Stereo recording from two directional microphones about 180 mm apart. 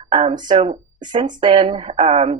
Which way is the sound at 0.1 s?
30° right (ahead or behind).